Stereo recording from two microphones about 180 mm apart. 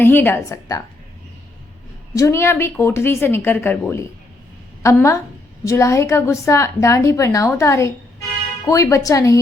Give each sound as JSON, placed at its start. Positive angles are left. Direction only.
{"t": 0.0, "sound": "a woman's voice", "side_deg": 10}
{"t": 2.1, "sound": "a woman's voice", "side_deg": 15}